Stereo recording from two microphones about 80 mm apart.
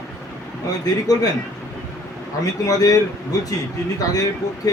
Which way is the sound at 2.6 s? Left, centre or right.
Left.